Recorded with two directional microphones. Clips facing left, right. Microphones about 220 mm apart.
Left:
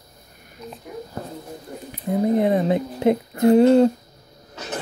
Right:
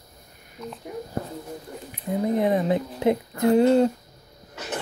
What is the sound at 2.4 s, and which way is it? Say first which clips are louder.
Speech: left 3 dB; 25° left (ahead or behind).